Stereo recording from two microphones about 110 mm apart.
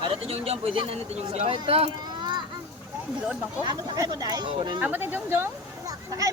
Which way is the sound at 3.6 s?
40° right (ahead or behind).